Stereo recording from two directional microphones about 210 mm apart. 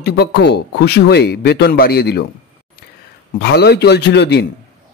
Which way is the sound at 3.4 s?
50° left (ahead or behind).